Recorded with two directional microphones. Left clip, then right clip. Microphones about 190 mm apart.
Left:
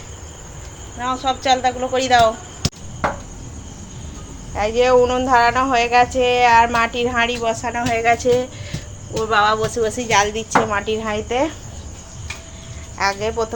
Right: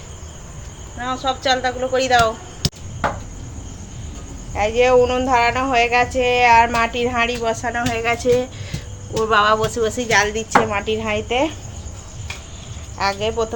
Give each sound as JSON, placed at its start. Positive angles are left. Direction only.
{"t": 0.9, "sound": "speech", "side_deg": 0}
{"t": 4.5, "sound": "speech", "side_deg": 0}
{"t": 13.0, "sound": "speech", "side_deg": 0}